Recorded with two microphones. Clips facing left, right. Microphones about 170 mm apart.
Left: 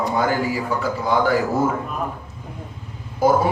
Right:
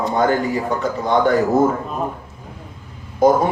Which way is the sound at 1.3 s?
40° right (ahead or behind).